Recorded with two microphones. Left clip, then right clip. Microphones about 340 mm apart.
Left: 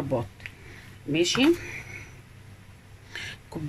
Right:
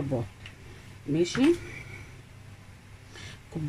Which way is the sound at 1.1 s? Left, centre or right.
Left.